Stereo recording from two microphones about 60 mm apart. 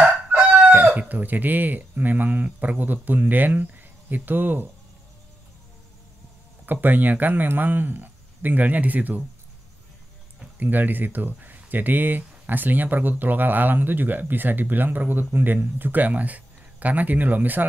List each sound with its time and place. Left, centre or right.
0.3 s speech: right
6.6 s speech: right
10.6 s speech: right